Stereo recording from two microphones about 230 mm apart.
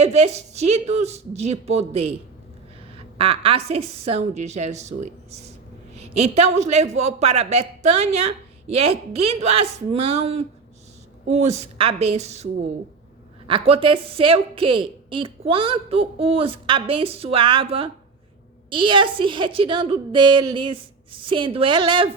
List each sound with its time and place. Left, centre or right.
0.0 s a woman's voice: right
3.2 s a woman's voice: right